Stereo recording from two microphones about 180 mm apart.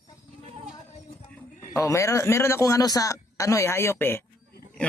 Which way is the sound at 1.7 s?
15° left (ahead or behind).